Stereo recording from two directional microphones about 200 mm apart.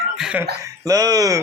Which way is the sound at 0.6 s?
15° right (ahead or behind).